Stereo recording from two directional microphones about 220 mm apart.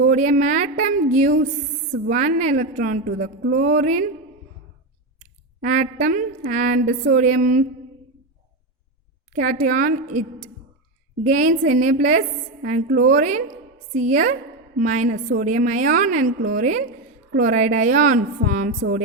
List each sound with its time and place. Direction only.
0.0 s a woman's voice: 35° right (ahead or behind)
5.6 s a woman's voice: 35° right (ahead or behind)
9.3 s a woman's voice: 35° right (ahead or behind)
11.3 s a woman's voice: 35° right (ahead or behind)